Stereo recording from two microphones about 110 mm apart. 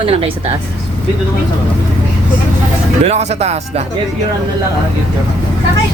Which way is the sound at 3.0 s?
75° right (ahead or behind).